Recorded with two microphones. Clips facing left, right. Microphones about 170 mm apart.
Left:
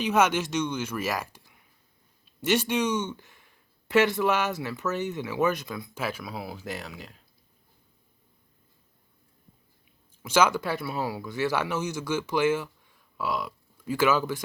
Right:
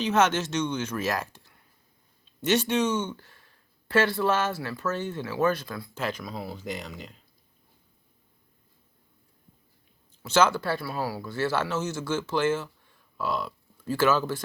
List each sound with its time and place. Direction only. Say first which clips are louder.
0.0 s speech: even; 10° left (ahead or behind)
10.2 s speech: even; 10° left (ahead or behind)